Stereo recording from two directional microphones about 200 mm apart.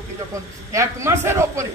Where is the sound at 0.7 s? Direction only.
15° right (ahead or behind).